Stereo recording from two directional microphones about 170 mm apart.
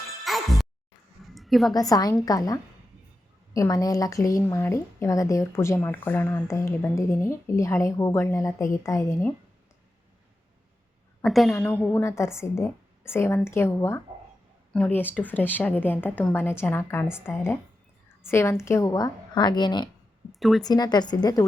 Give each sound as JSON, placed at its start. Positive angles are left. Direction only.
{"t": 0.3, "sound": "music", "side_deg": 0}
{"t": 1.2, "sound": "a sound", "side_deg": 0}
{"t": 1.7, "sound": "a woman's voice", "side_deg": 20}
{"t": 11.2, "sound": "a woman's voice", "side_deg": 0}
{"t": 11.5, "sound": "a woman's voice", "side_deg": 10}
{"t": 20.4, "sound": "speech", "side_deg": 0}
{"t": 20.7, "sound": "a woman's voice", "side_deg": 25}